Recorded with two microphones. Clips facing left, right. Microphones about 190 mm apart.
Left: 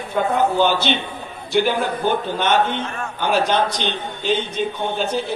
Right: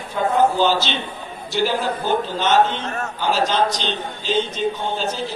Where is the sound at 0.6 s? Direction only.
55° left (ahead or behind).